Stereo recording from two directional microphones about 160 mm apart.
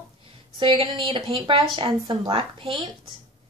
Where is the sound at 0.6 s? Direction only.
30° right (ahead or behind).